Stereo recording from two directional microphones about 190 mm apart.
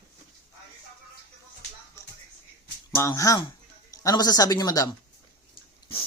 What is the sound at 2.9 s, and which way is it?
Speech, 15° left (ahead or behind).